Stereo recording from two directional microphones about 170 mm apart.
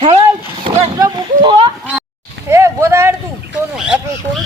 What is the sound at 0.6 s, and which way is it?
Speech, 35° right (ahead or behind).